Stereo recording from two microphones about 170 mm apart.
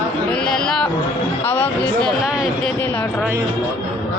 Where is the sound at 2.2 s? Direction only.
5° right (ahead or behind).